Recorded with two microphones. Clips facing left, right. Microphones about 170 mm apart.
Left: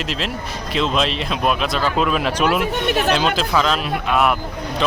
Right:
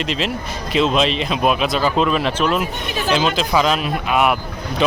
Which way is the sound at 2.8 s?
65° left (ahead or behind).